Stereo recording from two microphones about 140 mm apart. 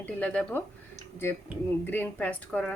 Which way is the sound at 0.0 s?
10° left (ahead or behind).